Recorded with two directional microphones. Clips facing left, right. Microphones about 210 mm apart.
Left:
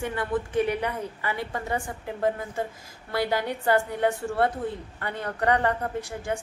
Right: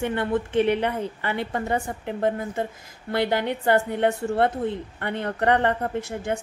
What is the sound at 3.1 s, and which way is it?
A woman's voice, 25° right (ahead or behind).